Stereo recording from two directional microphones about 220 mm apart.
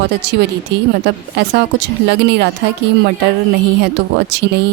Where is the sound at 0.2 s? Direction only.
50° right (ahead or behind).